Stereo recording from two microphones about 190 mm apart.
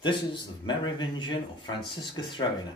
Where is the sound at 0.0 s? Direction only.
25° left (ahead or behind).